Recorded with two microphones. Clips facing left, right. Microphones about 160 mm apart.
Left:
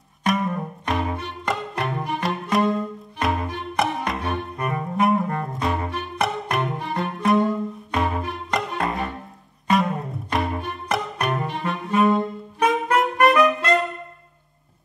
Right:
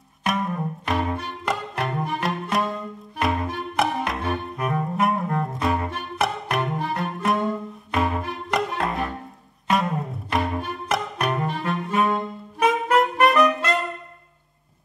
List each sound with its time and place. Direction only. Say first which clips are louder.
0.2 s music: left 2 dB; centre (ahead or behind)